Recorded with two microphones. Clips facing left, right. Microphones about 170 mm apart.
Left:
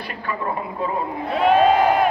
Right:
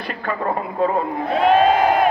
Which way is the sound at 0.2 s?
50° right (ahead or behind).